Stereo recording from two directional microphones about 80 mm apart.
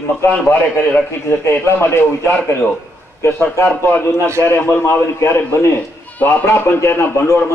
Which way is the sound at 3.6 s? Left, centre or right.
Left.